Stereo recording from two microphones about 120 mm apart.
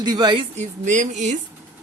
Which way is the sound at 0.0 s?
35° right (ahead or behind).